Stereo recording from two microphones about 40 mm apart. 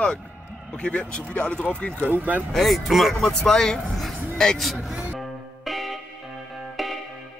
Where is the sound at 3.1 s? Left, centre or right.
Centre.